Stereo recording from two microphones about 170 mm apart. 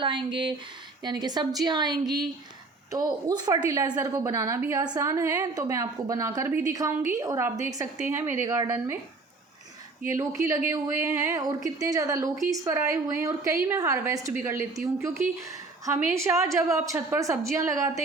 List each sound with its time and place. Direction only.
0.0 s a woman's voice: 30° right (ahead or behind)
10.1 s a woman's voice: 15° right (ahead or behind)